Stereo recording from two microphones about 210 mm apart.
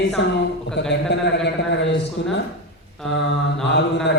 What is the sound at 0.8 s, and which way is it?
Speech, 55° left (ahead or behind).